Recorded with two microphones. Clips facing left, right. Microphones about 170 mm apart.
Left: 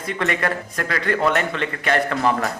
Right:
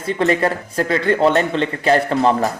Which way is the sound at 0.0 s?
30° right (ahead or behind).